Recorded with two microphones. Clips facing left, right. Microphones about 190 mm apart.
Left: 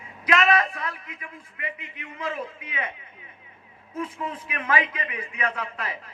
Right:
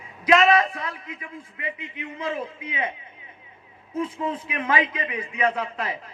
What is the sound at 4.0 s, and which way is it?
A man's voice, 25° right (ahead or behind).